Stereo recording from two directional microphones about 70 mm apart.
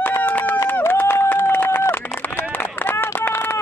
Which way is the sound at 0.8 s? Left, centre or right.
Left.